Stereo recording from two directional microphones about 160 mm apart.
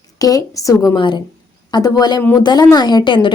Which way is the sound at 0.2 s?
20° left (ahead or behind).